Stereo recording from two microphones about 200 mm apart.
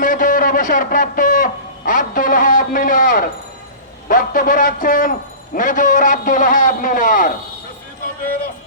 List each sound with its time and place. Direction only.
0.0 s a man's voice: 40° left (ahead or behind)